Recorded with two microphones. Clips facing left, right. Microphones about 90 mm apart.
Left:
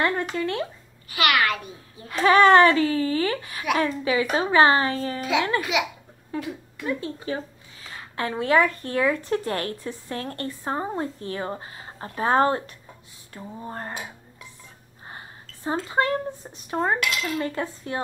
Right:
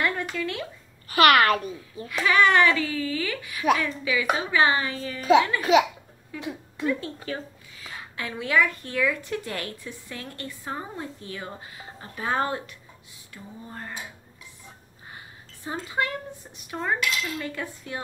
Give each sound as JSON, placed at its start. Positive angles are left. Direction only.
{"t": 0.0, "sound": "a sound", "side_deg": 35}
{"t": 1.0, "sound": "a child's voice", "side_deg": -40}
{"t": 2.0, "sound": "a woman's voice", "side_deg": 40}
{"t": 5.6, "sound": "a child's voice", "side_deg": -40}
{"t": 6.3, "sound": "a woman's voice", "side_deg": 35}
{"t": 6.9, "sound": "a woman's voice", "side_deg": 25}
{"t": 8.2, "sound": "a woman's voice", "side_deg": 40}
{"t": 15.0, "sound": "a sound", "side_deg": 40}
{"t": 15.9, "sound": "a woman's voice", "side_deg": 35}